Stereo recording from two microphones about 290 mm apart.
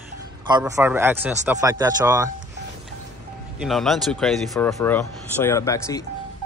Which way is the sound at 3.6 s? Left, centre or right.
Centre.